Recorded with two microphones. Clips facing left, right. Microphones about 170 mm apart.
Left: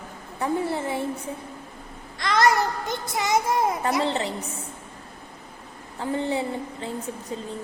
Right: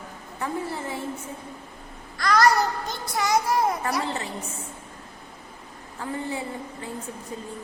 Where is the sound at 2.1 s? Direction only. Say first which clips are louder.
Right 1 dB; 25° left (ahead or behind).